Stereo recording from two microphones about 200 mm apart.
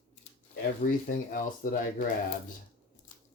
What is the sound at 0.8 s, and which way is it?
Speech, 50° left (ahead or behind).